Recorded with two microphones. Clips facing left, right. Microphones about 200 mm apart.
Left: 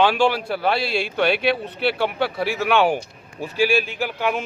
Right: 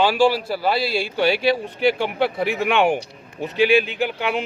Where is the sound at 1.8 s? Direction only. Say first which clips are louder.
Right 2 dB; 15° right (ahead or behind).